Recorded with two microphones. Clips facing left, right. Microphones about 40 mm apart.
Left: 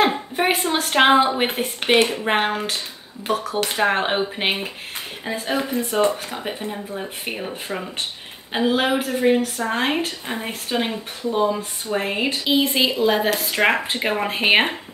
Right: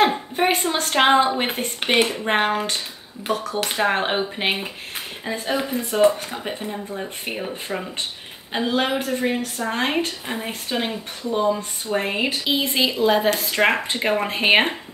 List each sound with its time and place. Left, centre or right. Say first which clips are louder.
0.0 s a woman's voice: even; centre
1.8 s a woman's voice: left 2 dB; centre